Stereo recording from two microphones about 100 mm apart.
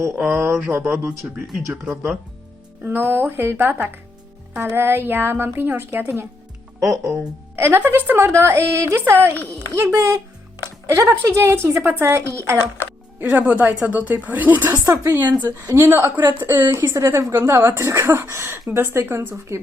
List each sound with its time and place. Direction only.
0.0 s speech: 25° right (ahead or behind)
2.8 s speech: 20° right (ahead or behind)
6.7 s speech: 35° right (ahead or behind)
7.5 s speech: 20° right (ahead or behind)
13.1 s speech: 10° right (ahead or behind)
14.7 s speech: 35° right (ahead or behind)
15.6 s speech: 25° right (ahead or behind)